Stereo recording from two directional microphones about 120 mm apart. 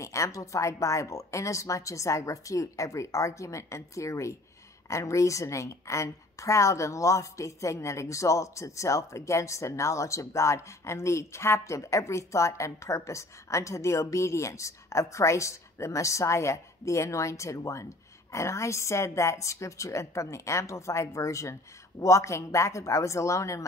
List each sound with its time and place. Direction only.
0.0 s a woman's voice: 25° left (ahead or behind)